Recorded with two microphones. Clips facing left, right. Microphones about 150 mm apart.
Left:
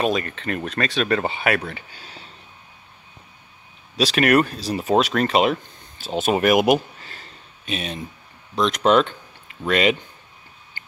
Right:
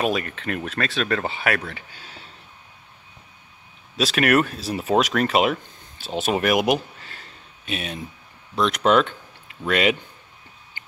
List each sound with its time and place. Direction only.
0.0 s speech: 5° right (ahead or behind)
3.9 s speech: centre (ahead or behind)
10.8 s a sound: 20° right (ahead or behind)